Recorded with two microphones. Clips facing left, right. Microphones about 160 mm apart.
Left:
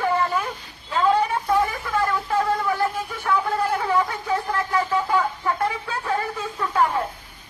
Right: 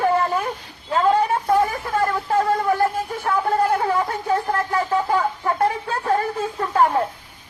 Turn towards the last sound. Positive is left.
turn(degrees=-45)  # may be behind; listen again after turning